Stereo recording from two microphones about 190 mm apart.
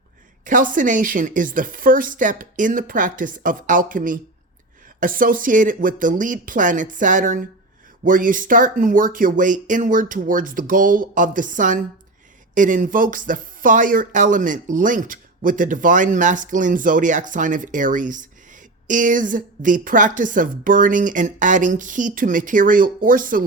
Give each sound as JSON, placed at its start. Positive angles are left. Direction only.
{"t": 0.4, "sound": "speech", "side_deg": -45}